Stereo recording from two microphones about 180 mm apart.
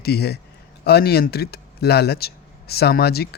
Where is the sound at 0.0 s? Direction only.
65° left (ahead or behind).